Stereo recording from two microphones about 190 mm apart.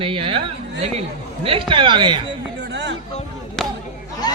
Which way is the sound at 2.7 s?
70° right (ahead or behind).